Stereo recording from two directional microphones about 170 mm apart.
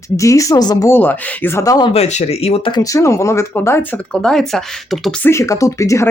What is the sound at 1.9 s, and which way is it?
Speech, 40° left (ahead or behind).